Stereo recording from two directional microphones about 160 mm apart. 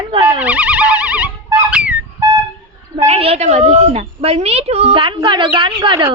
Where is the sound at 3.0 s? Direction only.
35° right (ahead or behind).